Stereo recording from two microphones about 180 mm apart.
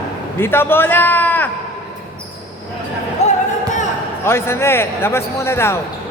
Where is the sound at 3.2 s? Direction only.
40° left (ahead or behind).